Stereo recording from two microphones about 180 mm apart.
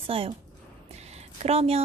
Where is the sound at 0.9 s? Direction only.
35° right (ahead or behind).